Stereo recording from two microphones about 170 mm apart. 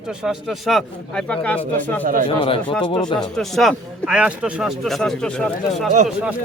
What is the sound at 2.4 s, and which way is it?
Speech, 30° left (ahead or behind).